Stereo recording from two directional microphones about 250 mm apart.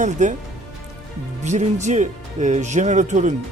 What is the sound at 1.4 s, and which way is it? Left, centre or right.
Speech, right.